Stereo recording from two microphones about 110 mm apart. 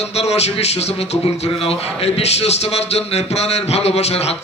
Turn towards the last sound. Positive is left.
turn(degrees=75)  # may be behind; listen again after turning